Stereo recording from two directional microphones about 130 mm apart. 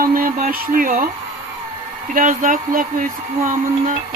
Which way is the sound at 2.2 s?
85° right.